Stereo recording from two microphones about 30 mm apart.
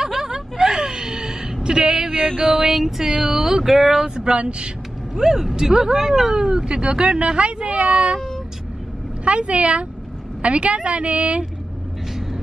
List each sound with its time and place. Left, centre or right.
0.0 s whimper: right
2.4 s speech: centre
4.0 s speech: right
5.1 s speech: centre; by 8.2 s right
9.2 s speech: right